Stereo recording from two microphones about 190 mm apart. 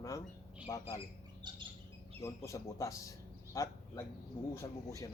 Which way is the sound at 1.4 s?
25° right (ahead or behind).